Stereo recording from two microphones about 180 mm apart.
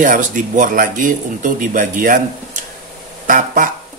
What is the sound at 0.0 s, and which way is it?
Speech, 45° right (ahead or behind).